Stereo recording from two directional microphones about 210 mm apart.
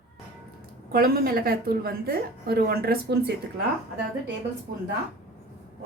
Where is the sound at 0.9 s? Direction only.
45° right (ahead or behind).